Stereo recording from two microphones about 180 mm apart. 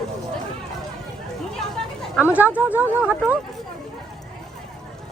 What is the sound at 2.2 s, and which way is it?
Speech, 10° right (ahead or behind).